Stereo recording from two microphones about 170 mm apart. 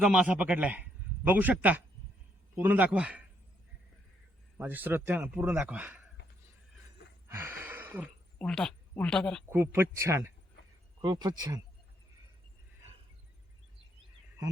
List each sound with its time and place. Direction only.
0.0 s a man's voice: 5° right (ahead or behind)
4.5 s a man's voice: 10° right (ahead or behind)
7.3 s gasp: 10° right (ahead or behind)
8.4 s speech: centre (ahead or behind)
9.5 s a man's voice: 15° right (ahead or behind)